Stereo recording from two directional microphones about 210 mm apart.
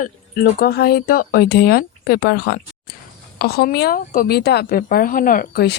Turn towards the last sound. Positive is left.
turn(degrees=50)  # may be behind; listen again after turning